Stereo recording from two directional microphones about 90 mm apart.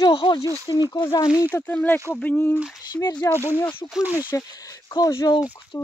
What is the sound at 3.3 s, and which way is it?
Speech, 25° right (ahead or behind).